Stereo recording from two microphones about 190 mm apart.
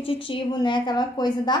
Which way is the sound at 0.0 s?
30° left (ahead or behind).